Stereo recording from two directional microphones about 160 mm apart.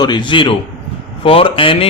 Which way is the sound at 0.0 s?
30° left (ahead or behind).